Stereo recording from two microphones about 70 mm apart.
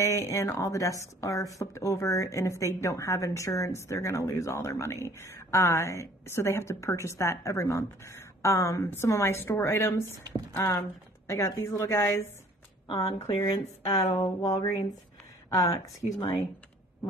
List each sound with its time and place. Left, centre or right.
0.0 s a woman's voice: left
12.9 s speech: left
15.5 s speech: left